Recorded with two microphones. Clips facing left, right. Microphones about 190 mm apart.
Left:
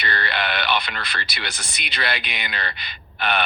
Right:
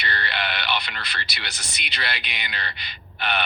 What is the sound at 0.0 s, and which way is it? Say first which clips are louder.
Speech: left 3 dB; 50° left (ahead or behind).